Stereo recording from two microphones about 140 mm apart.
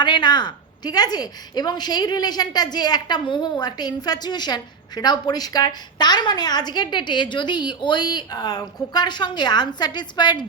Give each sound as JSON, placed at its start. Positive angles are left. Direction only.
{"t": 0.0, "sound": "a woman's voice", "side_deg": 35}